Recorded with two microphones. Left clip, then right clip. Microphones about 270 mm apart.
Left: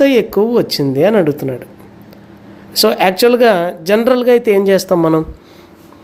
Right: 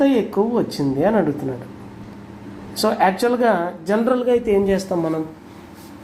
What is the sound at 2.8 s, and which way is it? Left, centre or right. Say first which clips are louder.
Speech: left 6 dB; left.